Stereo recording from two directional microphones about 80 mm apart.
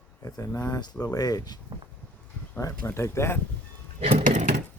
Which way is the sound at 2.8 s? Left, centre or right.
Left.